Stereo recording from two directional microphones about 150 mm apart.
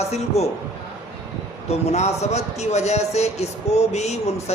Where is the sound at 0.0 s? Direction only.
45° left (ahead or behind).